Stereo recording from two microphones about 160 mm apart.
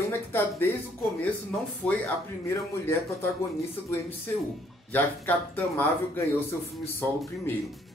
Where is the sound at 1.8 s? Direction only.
10° left (ahead or behind).